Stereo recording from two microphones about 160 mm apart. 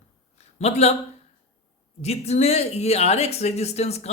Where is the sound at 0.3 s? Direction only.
40° left (ahead or behind).